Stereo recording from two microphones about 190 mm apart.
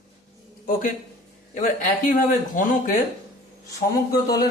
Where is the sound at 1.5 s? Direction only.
45° left (ahead or behind).